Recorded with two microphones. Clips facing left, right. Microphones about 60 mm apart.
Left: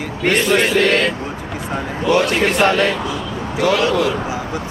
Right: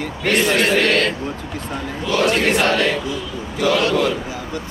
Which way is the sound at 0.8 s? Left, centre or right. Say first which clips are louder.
Left 2 dB; centre.